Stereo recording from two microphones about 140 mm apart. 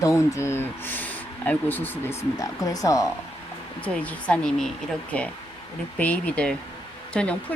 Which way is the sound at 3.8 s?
10° left (ahead or behind).